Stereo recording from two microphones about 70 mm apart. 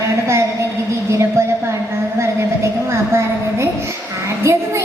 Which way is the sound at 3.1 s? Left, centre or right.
Right.